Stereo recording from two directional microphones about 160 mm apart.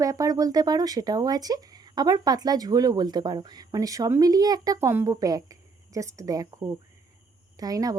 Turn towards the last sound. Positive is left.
turn(degrees=-25)  # may be behind; listen again after turning